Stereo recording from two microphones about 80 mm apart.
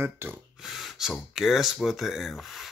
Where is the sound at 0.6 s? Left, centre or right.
Centre.